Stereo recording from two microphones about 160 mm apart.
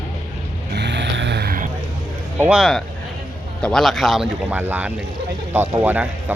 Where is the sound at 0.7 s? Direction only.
90° right; by 1.6 s 75° right (ahead or behind).